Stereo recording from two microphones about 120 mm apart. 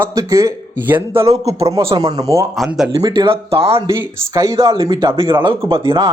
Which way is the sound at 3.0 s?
40° right (ahead or behind).